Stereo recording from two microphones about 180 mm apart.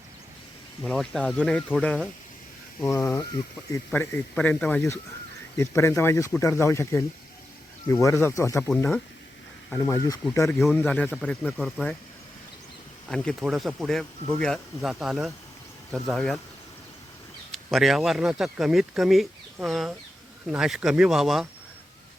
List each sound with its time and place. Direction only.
0.9 s speech: centre (ahead or behind)
2.8 s speech: 15° left (ahead or behind)
8.7 s speech: 5° left (ahead or behind)
9.6 s speech: 15° left (ahead or behind)
13.1 s speech: centre (ahead or behind)
17.5 s speech: centre (ahead or behind)